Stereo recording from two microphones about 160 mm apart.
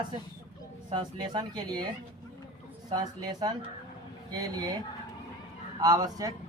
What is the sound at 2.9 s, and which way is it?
Speech, 25° right (ahead or behind).